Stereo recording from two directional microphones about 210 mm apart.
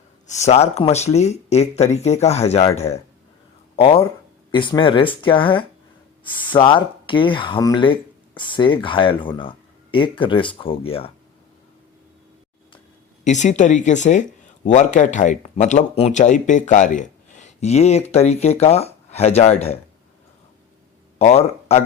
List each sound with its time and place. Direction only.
0.3 s speech: 30° left (ahead or behind)
13.2 s speech: 35° left (ahead or behind)
21.2 s speech: 30° left (ahead or behind)